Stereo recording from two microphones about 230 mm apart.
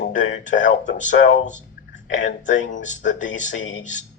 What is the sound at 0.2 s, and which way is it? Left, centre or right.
Speech, left.